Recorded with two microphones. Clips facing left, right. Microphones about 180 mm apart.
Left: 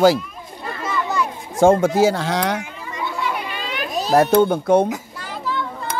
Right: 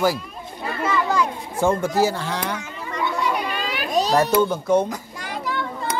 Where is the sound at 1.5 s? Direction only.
90° left.